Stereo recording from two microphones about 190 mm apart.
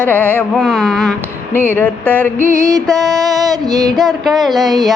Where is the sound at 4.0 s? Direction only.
Centre (ahead or behind).